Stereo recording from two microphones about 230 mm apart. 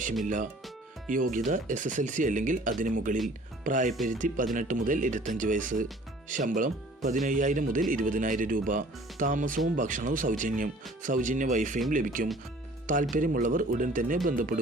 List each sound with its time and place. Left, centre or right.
1.1 s speech: right